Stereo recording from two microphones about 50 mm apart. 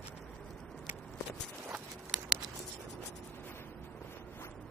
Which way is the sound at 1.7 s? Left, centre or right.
Centre.